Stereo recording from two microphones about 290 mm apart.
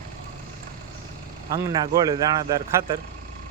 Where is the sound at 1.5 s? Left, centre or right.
Centre.